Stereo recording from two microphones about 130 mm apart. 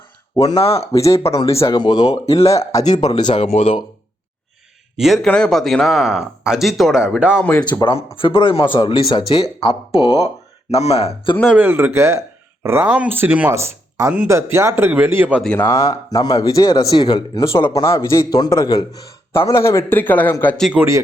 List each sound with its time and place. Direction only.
0.4 s speech: 45° left (ahead or behind)
0.8 s speech: 25° left (ahead or behind)
1.7 s speech: 35° left (ahead or behind)
2.7 s speech: 30° left (ahead or behind)
3.3 s speech: 50° left (ahead or behind)
4.9 s speech: centre (ahead or behind)
7.4 s a man's voice: 10° left (ahead or behind)
7.9 s speech: 45° left (ahead or behind)
11.4 s speech: 15° right (ahead or behind)
15.5 s speech: 20° left (ahead or behind)
17.5 s a man's voice: 20° left (ahead or behind)
20.7 s speech: 20° right (ahead or behind)